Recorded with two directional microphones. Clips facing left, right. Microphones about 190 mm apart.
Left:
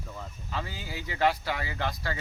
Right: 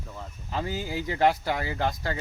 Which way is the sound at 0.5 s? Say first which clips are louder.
Right 7 dB; 45° right (ahead or behind).